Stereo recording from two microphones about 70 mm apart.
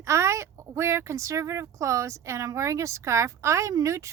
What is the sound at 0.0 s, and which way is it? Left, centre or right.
A woman's voice, right.